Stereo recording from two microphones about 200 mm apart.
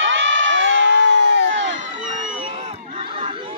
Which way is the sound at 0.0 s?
70° right (ahead or behind).